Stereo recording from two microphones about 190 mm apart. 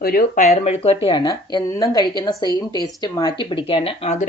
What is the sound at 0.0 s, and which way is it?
Speech, 50° left (ahead or behind).